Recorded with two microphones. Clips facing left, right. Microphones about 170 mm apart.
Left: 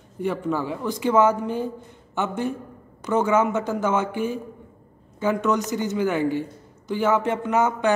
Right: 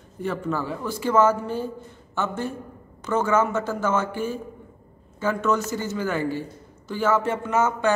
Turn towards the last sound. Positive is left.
turn(degrees=15)  # may be behind; listen again after turning